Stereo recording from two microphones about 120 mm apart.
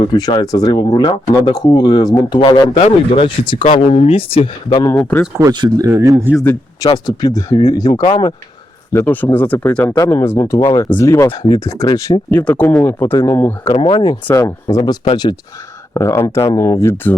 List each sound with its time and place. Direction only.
0.1 s speech: 35° left (ahead or behind)
3.6 s speech: 80° left
3.8 s speech: 55° left (ahead or behind)
4.7 s speech: 30° left (ahead or behind)
5.4 s speech: 35° right (ahead or behind)
6.8 s speech: 35° left (ahead or behind)
8.9 s speech: 20° left (ahead or behind)
9.9 s speech: 25° left (ahead or behind)
11.3 s speech: 45° left (ahead or behind)
11.8 s speech: 25° left (ahead or behind)
12.3 s speech: 15° left (ahead or behind)
13.7 s speech: 40° left (ahead or behind)
14.3 s speech: 25° left (ahead or behind)
16.0 s speech: 25° left (ahead or behind)